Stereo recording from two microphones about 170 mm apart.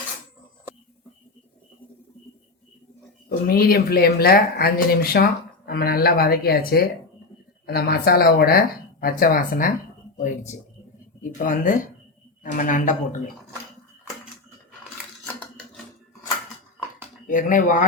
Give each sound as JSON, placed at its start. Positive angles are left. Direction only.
{"t": 3.2, "sound": "speech", "side_deg": 60}
{"t": 10.2, "sound": "a sound", "side_deg": 50}
{"t": 11.2, "sound": "speech", "side_deg": 55}
{"t": 17.2, "sound": "speech", "side_deg": 50}